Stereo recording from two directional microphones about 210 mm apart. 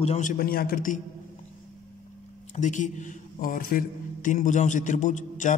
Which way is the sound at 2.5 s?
35° left (ahead or behind).